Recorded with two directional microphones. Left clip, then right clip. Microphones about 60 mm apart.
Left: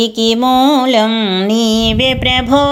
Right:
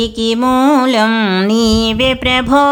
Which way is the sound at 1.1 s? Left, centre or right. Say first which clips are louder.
Right 1 dB; right.